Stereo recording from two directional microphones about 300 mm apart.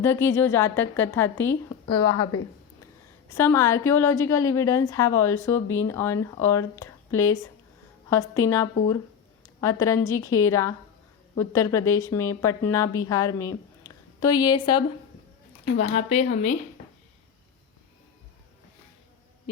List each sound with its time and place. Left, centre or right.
0.0 s a woman's voice: centre
3.2 s a woman's voice: centre